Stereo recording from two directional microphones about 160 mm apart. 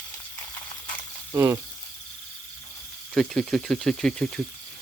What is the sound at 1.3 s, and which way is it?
Speech, 15° right (ahead or behind).